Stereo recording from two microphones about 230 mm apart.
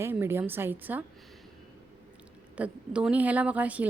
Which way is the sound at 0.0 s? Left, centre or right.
Centre.